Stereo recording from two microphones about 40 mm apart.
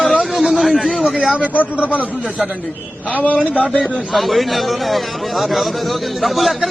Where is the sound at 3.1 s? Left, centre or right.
Left.